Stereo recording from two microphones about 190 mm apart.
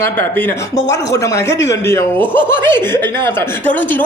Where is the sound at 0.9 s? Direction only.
15° left (ahead or behind).